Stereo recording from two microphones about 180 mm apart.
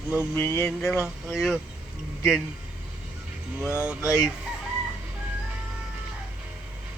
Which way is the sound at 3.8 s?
5° right (ahead or behind).